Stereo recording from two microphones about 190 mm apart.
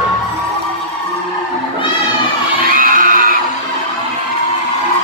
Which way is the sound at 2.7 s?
45° right (ahead or behind).